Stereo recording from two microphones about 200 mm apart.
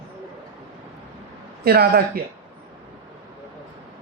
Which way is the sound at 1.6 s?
50° right (ahead or behind).